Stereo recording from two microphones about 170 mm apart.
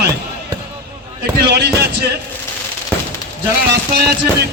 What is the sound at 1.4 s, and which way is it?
Speech, 75° right (ahead or behind).